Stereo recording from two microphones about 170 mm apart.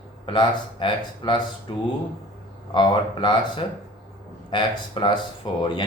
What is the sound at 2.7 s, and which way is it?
A man's voice, 25° left (ahead or behind).